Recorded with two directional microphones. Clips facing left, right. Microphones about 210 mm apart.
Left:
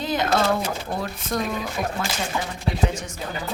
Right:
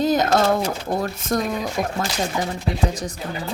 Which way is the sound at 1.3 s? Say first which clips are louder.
Right 4 dB; 45° right (ahead or behind).